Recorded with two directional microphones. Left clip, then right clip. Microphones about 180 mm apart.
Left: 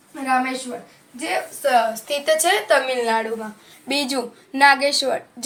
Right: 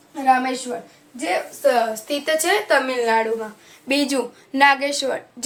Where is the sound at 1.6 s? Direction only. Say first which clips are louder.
Left 1 dB; 10° right (ahead or behind).